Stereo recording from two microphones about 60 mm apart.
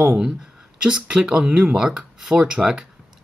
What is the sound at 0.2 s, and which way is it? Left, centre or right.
Speech, centre.